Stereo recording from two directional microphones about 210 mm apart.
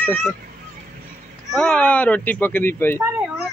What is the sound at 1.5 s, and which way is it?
Speech, 5° left (ahead or behind).